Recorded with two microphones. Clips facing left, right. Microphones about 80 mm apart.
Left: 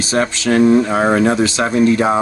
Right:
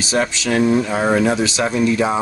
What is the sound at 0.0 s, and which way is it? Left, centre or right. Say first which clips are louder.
Speech: left 2 dB; left.